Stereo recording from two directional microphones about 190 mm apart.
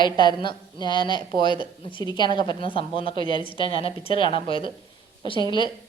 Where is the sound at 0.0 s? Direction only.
25° left (ahead or behind).